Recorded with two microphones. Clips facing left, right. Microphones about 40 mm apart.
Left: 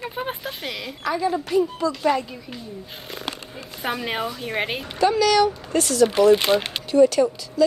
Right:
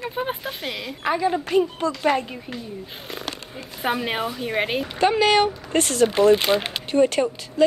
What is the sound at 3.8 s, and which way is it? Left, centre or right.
A woman's voice, centre.